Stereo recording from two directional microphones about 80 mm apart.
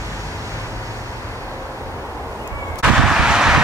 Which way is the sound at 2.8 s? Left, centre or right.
Centre.